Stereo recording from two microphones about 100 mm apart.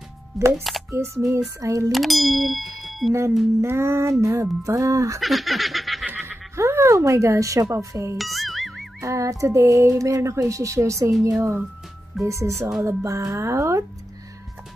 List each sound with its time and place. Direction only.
0.3 s speech: centre (ahead or behind)
0.9 s speech: 25° right (ahead or behind)
1.9 s speech: centre (ahead or behind)
3.1 s speech: 25° right (ahead or behind)
5.2 s a sound: centre (ahead or behind)
6.0 s a sound: 25° right (ahead or behind)
7.7 s speech: 30° right (ahead or behind)
8.2 s music: centre (ahead or behind)
9.0 s speech: 30° right (ahead or behind)